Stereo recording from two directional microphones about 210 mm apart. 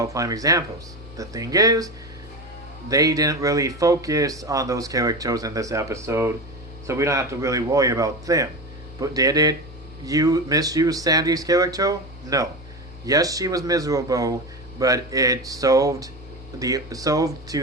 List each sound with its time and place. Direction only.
0.0 s speech: 15° right (ahead or behind)
2.9 s speech: 15° right (ahead or behind)